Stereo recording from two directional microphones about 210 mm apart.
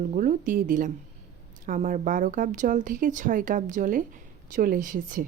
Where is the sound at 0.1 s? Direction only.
40° right (ahead or behind).